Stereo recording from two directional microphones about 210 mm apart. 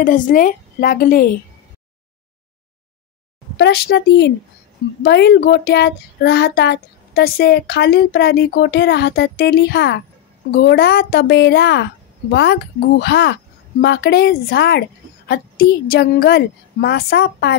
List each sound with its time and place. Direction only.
0.0 s a woman's voice: 40° left (ahead or behind)
3.5 s a woman's voice: 55° left (ahead or behind)